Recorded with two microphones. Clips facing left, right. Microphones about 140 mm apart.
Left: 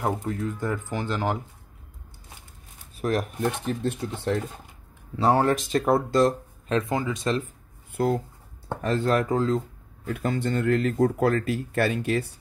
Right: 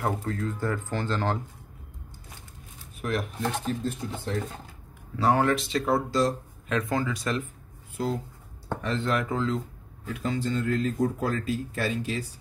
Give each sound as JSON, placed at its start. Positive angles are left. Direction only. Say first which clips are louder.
{"t": 0.0, "sound": "speech", "louder": "left 2 dB", "side_deg": 20}
{"t": 3.0, "sound": "speech", "louder": "left 4 dB", "side_deg": 40}
{"t": 3.6, "sound": "speech", "louder": "left 2 dB", "side_deg": 70}
{"t": 5.1, "sound": "speech", "louder": "left 2 dB", "side_deg": 30}
{"t": 6.7, "sound": "speech", "louder": "left 2 dB", "side_deg": 25}
{"t": 8.0, "sound": "speech", "louder": "left 5 dB", "side_deg": 55}
{"t": 8.8, "sound": "speech", "louder": "left 5 dB", "side_deg": 40}
{"t": 10.0, "sound": "speech", "louder": "left 2 dB", "side_deg": 50}